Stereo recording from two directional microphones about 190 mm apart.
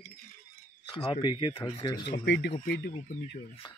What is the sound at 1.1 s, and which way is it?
Speech, 25° left (ahead or behind).